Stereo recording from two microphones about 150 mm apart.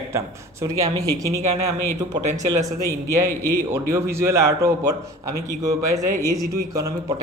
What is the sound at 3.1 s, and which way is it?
A man's voice, 20° right (ahead or behind).